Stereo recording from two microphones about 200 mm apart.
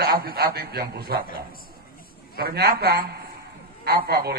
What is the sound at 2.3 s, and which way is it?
A man's voice, 50° right (ahead or behind).